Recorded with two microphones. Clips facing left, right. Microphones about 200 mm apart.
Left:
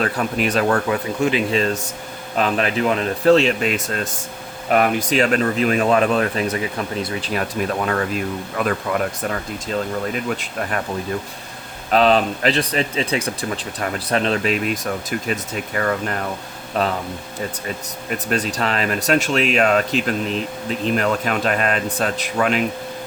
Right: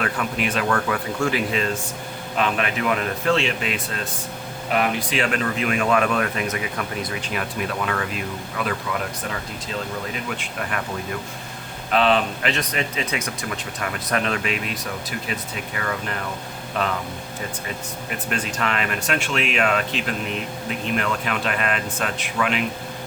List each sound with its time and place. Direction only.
0.0 s speech: 40° left (ahead or behind)
0.9 s speech: 20° left (ahead or behind)
2.3 s speech: 35° left (ahead or behind)
10.2 s speech: 40° left (ahead or behind)
11.9 s speech: 40° left (ahead or behind)
18.3 s speech: 35° left (ahead or behind)